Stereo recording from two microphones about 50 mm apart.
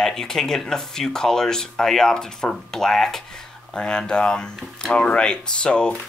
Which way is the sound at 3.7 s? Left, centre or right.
Centre.